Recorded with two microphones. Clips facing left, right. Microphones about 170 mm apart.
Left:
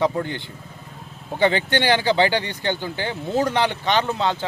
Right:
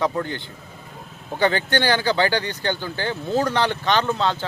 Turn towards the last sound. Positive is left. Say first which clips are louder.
# even
turn(degrees=15)  # may be behind; listen again after turning